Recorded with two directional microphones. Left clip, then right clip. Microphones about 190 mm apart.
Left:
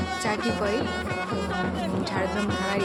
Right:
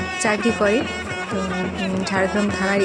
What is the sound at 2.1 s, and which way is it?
Speech, 30° right (ahead or behind).